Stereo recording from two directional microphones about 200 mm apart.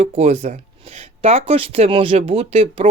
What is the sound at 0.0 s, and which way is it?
Speech, 30° right (ahead or behind).